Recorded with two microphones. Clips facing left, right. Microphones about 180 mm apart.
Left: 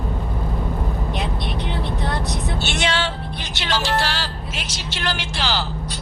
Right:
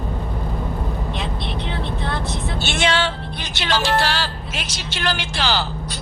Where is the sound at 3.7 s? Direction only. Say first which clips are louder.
Right 2 dB; 55° right (ahead or behind).